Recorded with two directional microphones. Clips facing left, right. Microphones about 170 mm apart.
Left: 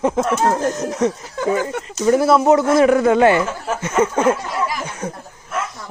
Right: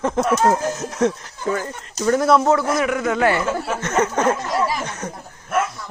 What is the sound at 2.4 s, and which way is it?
Speech, 25° left (ahead or behind).